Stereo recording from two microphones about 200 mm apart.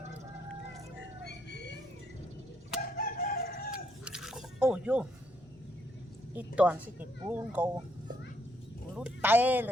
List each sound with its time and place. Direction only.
1.3 s music: 60° left (ahead or behind)
3.0 s chicken: 45° left (ahead or behind)
4.0 s a sound: 5° right (ahead or behind)
6.3 s speech: 5° right (ahead or behind)
9.0 s speech: 10° right (ahead or behind)